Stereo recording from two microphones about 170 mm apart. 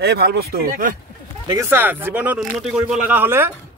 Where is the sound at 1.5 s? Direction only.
15° right (ahead or behind).